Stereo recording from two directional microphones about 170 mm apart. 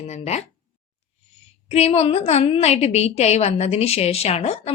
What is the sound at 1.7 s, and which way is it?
A woman's voice, 40° left (ahead or behind).